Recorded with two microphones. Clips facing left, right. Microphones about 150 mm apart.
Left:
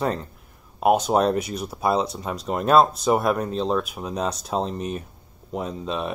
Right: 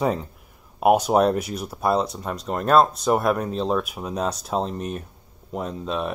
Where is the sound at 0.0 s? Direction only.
5° right (ahead or behind).